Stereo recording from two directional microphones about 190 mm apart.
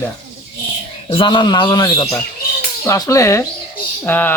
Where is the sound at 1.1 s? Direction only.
25° left (ahead or behind).